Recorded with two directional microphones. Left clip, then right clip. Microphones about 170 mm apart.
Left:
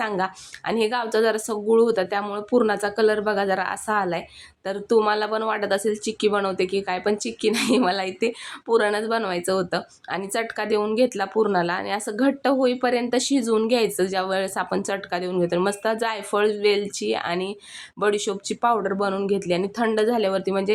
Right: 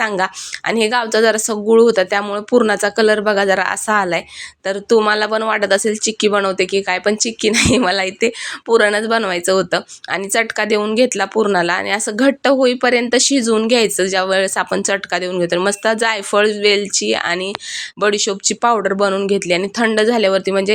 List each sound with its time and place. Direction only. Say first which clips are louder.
0.0 s speech: right 7 dB; 20° right (ahead or behind)